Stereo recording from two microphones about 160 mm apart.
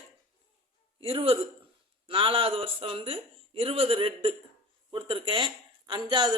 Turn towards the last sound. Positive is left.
turn(degrees=-30)  # may be behind; listen again after turning